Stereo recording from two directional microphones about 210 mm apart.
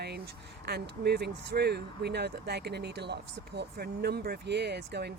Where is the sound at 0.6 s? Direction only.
50° right (ahead or behind).